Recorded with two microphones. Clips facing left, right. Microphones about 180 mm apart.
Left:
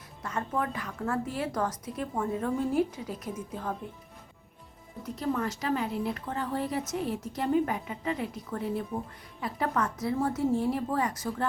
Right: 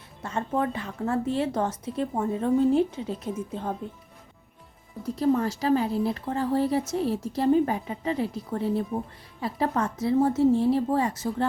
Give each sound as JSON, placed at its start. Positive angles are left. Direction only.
{"t": 0.2, "sound": "a woman's voice", "side_deg": -25}
{"t": 5.0, "sound": "a woman's voice", "side_deg": -30}